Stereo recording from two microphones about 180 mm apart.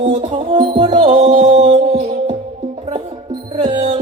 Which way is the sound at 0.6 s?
25° right (ahead or behind).